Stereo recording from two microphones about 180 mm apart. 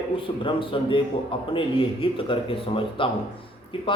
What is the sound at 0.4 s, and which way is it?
Speech, 30° left (ahead or behind).